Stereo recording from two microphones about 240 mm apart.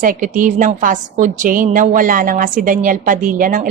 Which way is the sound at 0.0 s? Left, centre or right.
Right.